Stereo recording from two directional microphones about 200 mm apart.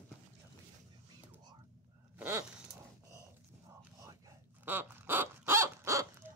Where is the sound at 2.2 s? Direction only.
10° right (ahead or behind).